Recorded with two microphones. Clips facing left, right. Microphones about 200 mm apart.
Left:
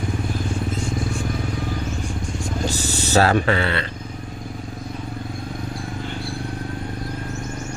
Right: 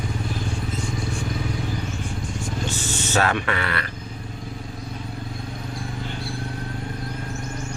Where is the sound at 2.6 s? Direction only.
35° left (ahead or behind).